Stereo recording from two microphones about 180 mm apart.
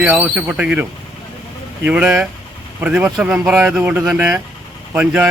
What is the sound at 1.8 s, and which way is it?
Speech, 5° right (ahead or behind).